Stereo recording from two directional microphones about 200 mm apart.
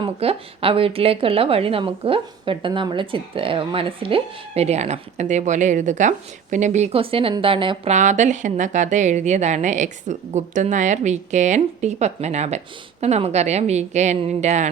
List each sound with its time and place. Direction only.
0.0 s a woman's voice: 30° right (ahead or behind)
7.9 s a woman's voice: 35° right (ahead or behind)